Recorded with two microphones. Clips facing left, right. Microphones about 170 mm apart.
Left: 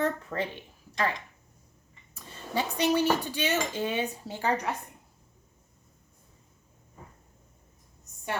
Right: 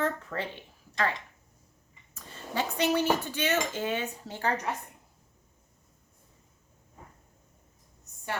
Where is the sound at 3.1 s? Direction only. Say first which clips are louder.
Even; 15° left (ahead or behind).